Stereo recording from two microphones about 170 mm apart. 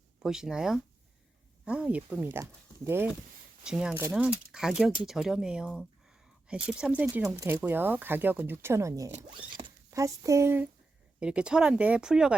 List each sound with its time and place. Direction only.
0.2 s speech: 5° right (ahead or behind)
3.6 s speech: 5° right (ahead or behind)